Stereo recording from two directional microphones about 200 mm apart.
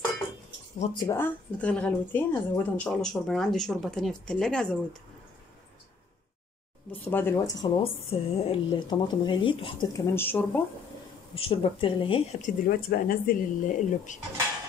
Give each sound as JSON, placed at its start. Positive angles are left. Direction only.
{"t": 0.9, "sound": "speech", "side_deg": 15}
{"t": 6.9, "sound": "speech", "side_deg": 10}
{"t": 11.3, "sound": "speech", "side_deg": 25}
{"t": 12.4, "sound": "speech", "side_deg": 45}